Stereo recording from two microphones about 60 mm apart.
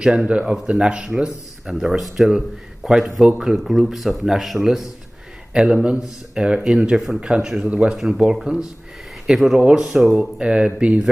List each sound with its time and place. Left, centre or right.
0.0 s speech: centre
9.6 s speech: centre
9.8 s speech: centre
10.4 s speech: centre